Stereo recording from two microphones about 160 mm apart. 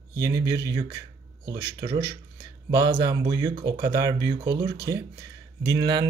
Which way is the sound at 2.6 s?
20° right (ahead or behind).